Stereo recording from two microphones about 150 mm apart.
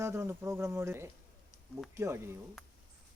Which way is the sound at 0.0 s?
15° right (ahead or behind).